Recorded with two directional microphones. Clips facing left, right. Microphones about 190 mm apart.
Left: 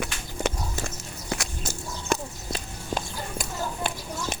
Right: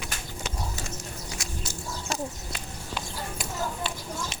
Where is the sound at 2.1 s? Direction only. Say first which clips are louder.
Left 4 dB; 55° left (ahead or behind).